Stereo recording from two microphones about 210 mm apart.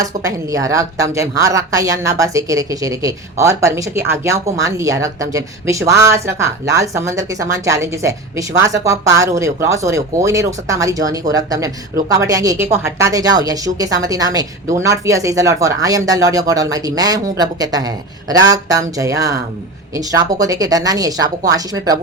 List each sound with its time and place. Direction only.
0.0 s a woman's voice: 15° right (ahead or behind)